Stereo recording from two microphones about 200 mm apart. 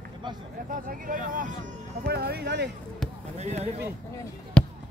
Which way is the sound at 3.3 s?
35° right (ahead or behind).